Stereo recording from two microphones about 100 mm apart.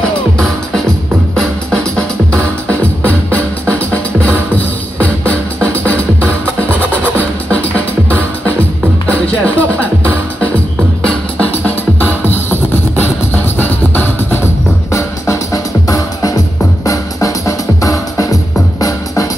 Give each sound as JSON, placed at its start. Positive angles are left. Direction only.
{"t": 1.3, "sound": "music", "side_deg": 5}
{"t": 11.1, "sound": "music", "side_deg": 10}
{"t": 12.9, "sound": "music", "side_deg": 20}